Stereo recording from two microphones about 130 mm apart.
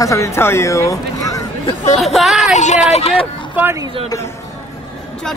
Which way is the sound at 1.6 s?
60° left (ahead or behind).